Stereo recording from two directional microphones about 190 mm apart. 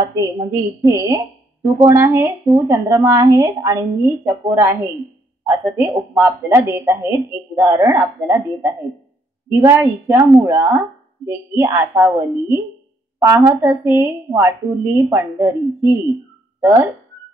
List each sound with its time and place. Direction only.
0.0 s a woman's voice: 20° right (ahead or behind)